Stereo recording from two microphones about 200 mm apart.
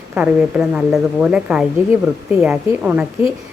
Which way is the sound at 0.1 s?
5° right (ahead or behind).